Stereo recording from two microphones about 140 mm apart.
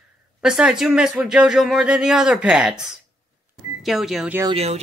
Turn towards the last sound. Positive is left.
turn(degrees=-45)  # may be behind; listen again after turning